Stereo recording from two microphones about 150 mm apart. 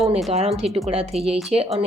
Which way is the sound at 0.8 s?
45° right (ahead or behind).